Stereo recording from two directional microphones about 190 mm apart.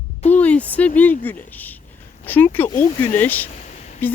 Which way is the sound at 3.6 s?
40° left (ahead or behind).